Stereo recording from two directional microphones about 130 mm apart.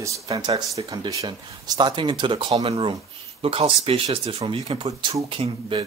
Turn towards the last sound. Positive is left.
turn(degrees=-45)  # may be behind; listen again after turning